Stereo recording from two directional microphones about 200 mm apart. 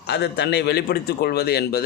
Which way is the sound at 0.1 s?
60° left (ahead or behind).